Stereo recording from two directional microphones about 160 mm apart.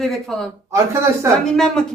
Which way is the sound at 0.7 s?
20° right (ahead or behind).